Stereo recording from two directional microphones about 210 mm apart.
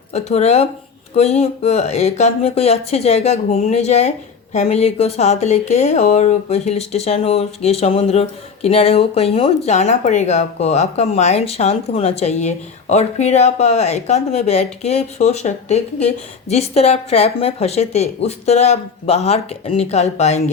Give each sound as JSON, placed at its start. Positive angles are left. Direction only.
{"t": 0.1, "sound": "speech", "side_deg": 30}